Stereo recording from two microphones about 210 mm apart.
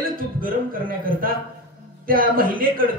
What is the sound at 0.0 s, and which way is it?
A man's voice, 40° right (ahead or behind).